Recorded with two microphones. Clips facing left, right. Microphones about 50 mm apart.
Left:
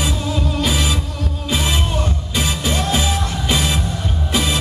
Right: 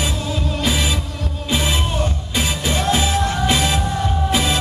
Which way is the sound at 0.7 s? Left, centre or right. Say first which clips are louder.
Left 1 dB; centre.